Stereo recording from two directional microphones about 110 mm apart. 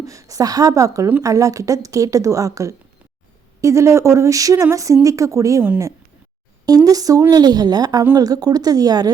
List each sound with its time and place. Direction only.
0.0 s a woman's voice: 30° right (ahead or behind)
3.6 s a sound: 25° right (ahead or behind)
6.7 s a woman's voice: 35° right (ahead or behind)